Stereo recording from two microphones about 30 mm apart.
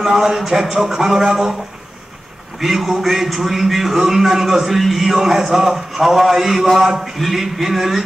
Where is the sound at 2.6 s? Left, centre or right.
Centre.